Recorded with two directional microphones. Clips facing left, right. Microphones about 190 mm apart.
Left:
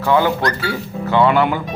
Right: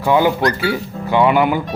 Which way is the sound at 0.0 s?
15° right (ahead or behind).